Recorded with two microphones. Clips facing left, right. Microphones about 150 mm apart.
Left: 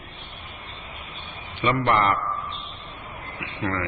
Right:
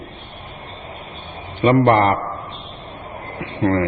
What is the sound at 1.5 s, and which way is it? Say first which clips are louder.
Speech: right 8 dB; 45° right (ahead or behind).